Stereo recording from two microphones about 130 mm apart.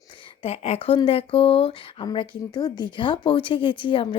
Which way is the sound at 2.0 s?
35° left (ahead or behind).